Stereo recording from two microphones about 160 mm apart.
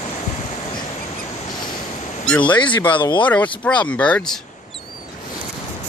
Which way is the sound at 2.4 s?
30° left (ahead or behind).